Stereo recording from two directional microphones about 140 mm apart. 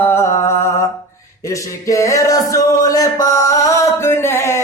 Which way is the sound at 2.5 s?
25° left (ahead or behind).